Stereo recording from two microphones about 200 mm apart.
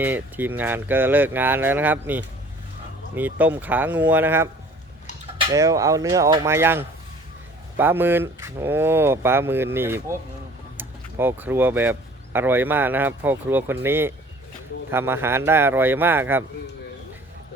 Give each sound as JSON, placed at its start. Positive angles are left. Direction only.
{"t": 0.0, "sound": "speech", "side_deg": -10}